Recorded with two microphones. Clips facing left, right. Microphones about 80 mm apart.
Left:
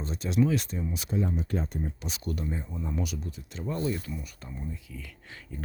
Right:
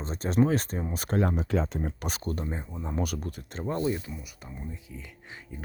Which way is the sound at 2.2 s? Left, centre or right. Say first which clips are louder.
Left 1 dB; right.